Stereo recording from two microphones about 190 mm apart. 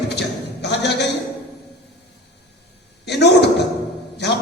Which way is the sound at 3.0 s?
60° left (ahead or behind).